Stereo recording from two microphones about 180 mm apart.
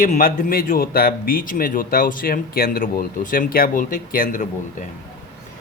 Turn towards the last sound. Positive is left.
turn(degrees=45)  # may be behind; listen again after turning